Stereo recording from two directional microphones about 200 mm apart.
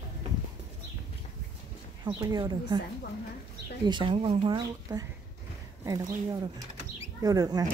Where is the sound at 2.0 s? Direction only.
20° right (ahead or behind).